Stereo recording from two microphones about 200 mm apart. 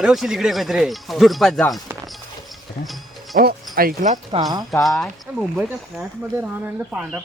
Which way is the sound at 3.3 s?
45° right (ahead or behind).